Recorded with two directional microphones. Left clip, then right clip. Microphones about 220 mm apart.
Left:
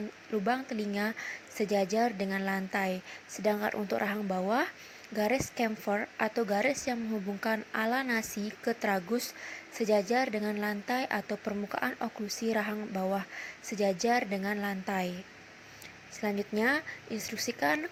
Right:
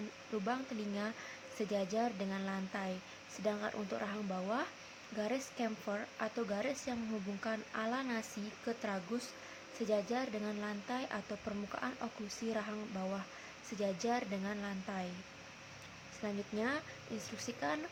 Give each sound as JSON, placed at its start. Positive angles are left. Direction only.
{"t": 0.4, "sound": "speech", "side_deg": 25}
{"t": 16.2, "sound": "speech", "side_deg": 30}